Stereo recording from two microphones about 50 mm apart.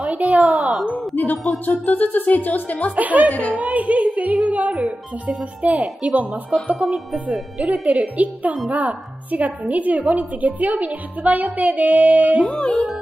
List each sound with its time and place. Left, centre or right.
0.1 s speech: right
0.6 s a sound: centre
0.9 s a woman's voice: left
3.0 s a woman's voice: right